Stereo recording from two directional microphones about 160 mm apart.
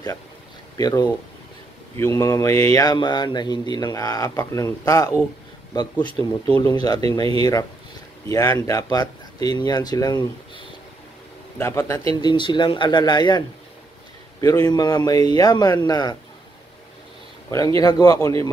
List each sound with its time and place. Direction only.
0.7 s speech: 25° left (ahead or behind)
6.1 s speech: 25° left (ahead or behind)
8.3 s speech: 20° left (ahead or behind)
14.4 s speech: 20° left (ahead or behind)
17.5 s speech: 20° left (ahead or behind)